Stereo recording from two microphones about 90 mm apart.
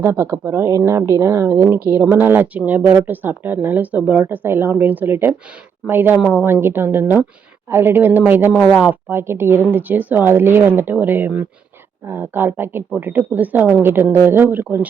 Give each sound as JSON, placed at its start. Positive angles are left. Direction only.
{"t": 0.0, "sound": "speech", "side_deg": -25}
{"t": 8.6, "sound": "speech", "side_deg": -5}
{"t": 8.9, "sound": "speech", "side_deg": -25}